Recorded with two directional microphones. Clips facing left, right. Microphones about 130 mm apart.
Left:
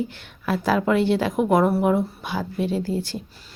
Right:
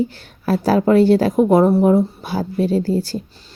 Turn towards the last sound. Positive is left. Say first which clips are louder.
# right 6 dB
turn(degrees=-40)  # may be behind; listen again after turning